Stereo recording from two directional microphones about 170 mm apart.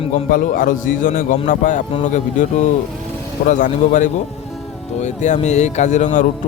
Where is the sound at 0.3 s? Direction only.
55° left (ahead or behind).